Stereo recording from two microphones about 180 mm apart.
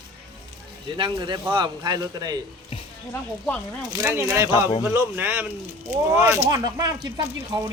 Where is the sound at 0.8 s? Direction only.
25° right (ahead or behind).